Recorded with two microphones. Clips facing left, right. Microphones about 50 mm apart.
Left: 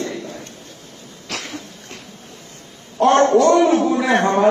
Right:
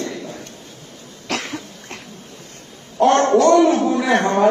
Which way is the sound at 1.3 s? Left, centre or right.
Right.